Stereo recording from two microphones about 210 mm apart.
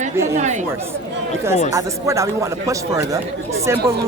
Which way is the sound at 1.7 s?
15° right (ahead or behind).